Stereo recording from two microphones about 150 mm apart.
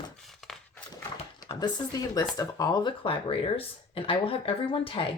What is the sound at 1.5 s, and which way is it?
Speech, 25° left (ahead or behind).